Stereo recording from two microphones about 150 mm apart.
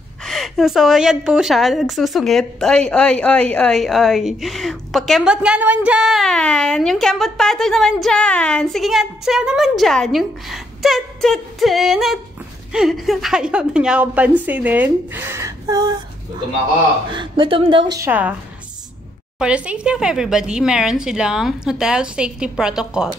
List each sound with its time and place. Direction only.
0.2 s a woman's voice: centre (ahead or behind); by 16.0 s 25° right (ahead or behind)
17.1 s speech: 35° right (ahead or behind)
17.9 s a woman's voice: 15° right (ahead or behind)
19.3 s a woman's voice: 5° right (ahead or behind)